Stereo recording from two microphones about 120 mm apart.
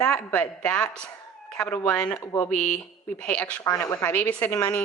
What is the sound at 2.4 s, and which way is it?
A woman's voice, 5° left (ahead or behind).